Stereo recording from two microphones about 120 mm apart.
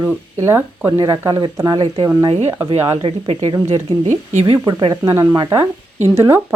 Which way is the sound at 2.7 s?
50° right (ahead or behind).